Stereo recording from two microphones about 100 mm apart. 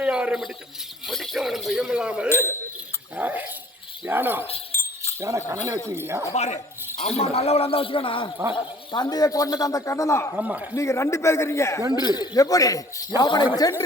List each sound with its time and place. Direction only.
0.0 s a sound: 10° right (ahead or behind)
1.0 s speech: centre (ahead or behind)
2.3 s a man's voice: 25° left (ahead or behind)
3.2 s a man's voice: 15° right (ahead or behind)
4.7 s keys jangling: 30° left (ahead or behind)
5.5 s speech: 30° right (ahead or behind)
7.2 s a man's voice: 90° left; by 8.3 s 60° left (ahead or behind)
8.5 s speech: 50° left (ahead or behind); by 10.3 s 30° left (ahead or behind)
10.3 s a man's voice: 15° right (ahead or behind)
10.8 s a man's voice: 30° left (ahead or behind)
11.9 s a man's voice: 45° left (ahead or behind)